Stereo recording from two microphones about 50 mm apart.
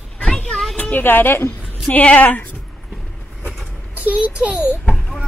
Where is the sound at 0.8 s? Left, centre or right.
Left.